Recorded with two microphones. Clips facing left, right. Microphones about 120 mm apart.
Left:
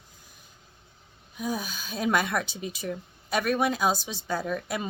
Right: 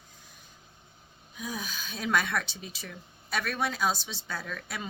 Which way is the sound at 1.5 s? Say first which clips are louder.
Left 5 dB; 45° left (ahead or behind).